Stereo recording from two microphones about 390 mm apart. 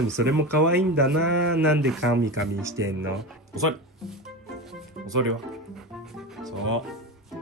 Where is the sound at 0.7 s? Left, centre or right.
Right.